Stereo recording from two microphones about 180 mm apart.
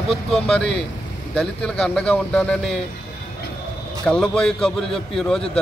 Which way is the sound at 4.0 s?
5° left (ahead or behind).